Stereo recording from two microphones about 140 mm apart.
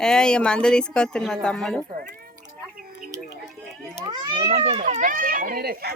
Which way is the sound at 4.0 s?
40° right (ahead or behind).